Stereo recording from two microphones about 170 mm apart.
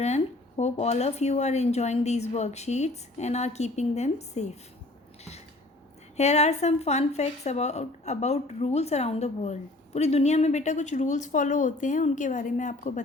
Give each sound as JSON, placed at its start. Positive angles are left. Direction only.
{"t": 0.0, "sound": "a woman's voice", "side_deg": 40}
{"t": 6.1, "sound": "a woman's voice", "side_deg": 40}